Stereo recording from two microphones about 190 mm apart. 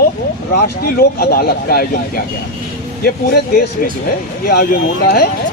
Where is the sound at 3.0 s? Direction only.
50° left (ahead or behind).